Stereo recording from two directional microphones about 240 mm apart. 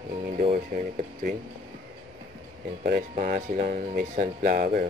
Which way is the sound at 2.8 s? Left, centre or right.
Right.